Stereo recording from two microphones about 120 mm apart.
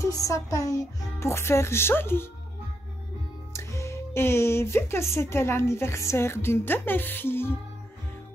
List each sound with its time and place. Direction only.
0.0 s speech: 25° left (ahead or behind)
3.5 s speech: 25° left (ahead or behind)